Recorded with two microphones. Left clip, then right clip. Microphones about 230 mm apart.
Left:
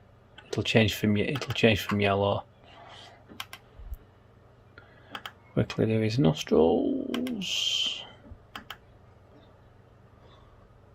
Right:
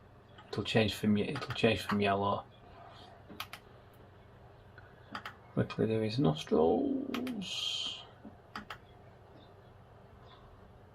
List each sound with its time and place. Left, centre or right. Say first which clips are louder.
0.5 s speech: left 6 dB; left
5.2 s speech: left 6 dB; left